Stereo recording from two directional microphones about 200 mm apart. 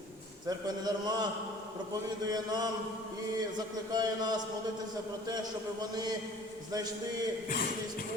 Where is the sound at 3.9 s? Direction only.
20° right (ahead or behind).